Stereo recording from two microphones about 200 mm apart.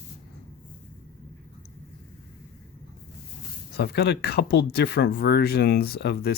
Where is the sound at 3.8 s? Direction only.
55° left (ahead or behind).